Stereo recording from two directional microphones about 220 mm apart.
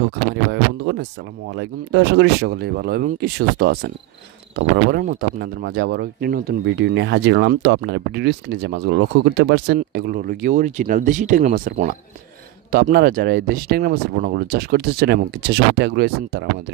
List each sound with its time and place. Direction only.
0.0 s speech: 50° right (ahead or behind)